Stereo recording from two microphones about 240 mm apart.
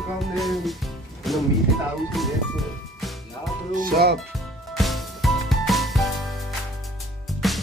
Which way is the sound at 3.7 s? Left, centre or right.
Right.